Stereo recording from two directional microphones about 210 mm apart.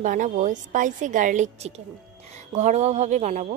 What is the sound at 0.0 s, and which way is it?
A woman's voice, 40° right (ahead or behind).